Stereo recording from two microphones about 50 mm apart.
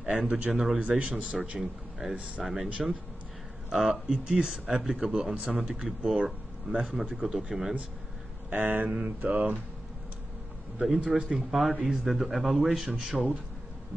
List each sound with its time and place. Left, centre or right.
0.1 s speech: right
0.5 s a man's voice: centre
0.7 s speech: right
1.1 s a man's voice: centre
2.1 s speech: right
2.4 s a man's voice: centre
4.1 s a man's voice: centre
8.5 s speech: right
11.2 s a man's voice: centre